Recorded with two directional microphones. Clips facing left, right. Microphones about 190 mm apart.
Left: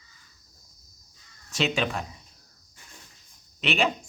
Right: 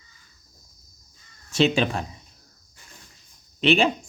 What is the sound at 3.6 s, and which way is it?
Speech, 30° right (ahead or behind).